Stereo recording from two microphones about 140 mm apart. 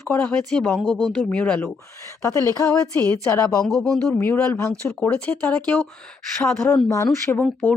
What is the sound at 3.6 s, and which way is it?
Speech, 5° left (ahead or behind).